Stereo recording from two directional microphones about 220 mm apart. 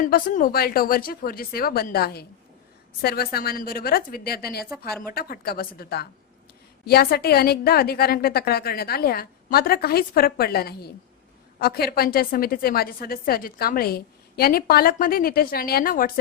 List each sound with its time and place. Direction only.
0.0 s a woman's voice: 40° left (ahead or behind)